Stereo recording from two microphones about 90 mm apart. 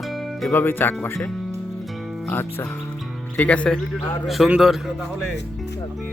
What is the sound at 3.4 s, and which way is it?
Speech, 15° left (ahead or behind).